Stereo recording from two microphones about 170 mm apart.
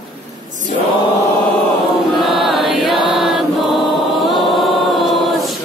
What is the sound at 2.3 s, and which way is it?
Chant, centre (ahead or behind).